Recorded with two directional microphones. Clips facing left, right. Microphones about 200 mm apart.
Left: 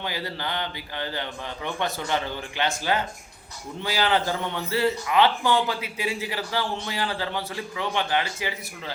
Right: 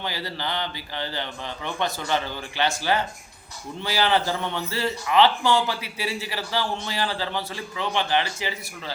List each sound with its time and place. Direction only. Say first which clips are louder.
0.0 s speech: even; 15° left (ahead or behind)
4.0 s speech: right 1 dB; 15° left (ahead or behind)